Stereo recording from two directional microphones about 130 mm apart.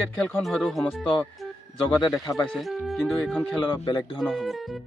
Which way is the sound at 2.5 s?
Centre (ahead or behind).